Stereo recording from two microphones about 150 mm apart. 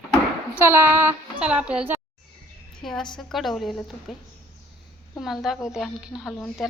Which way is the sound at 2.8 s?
5° left (ahead or behind).